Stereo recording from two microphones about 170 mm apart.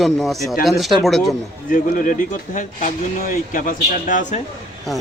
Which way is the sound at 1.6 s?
50° left (ahead or behind).